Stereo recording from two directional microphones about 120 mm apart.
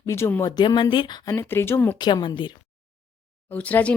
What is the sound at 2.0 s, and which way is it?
Speech, 40° left (ahead or behind).